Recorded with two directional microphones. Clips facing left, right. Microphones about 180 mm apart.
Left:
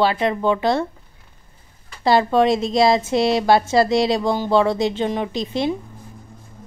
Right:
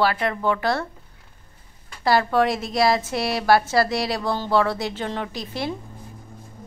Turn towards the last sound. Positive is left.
turn(degrees=20)  # may be behind; listen again after turning